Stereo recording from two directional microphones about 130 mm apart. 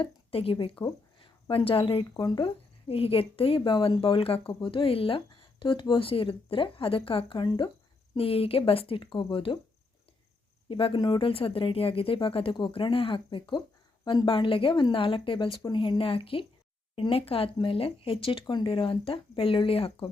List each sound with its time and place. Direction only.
0.0 s speech: 45° left (ahead or behind)
2.9 s speech: 45° left (ahead or behind)
8.1 s speech: 45° left (ahead or behind)
10.7 s speech: 40° left (ahead or behind)